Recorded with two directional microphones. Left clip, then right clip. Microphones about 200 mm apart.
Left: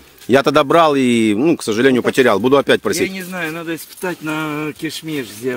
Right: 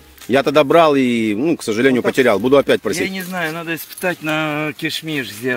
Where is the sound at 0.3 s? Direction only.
25° left (ahead or behind).